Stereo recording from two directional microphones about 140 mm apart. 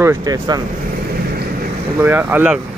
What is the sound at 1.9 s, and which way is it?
Speech, 15° right (ahead or behind).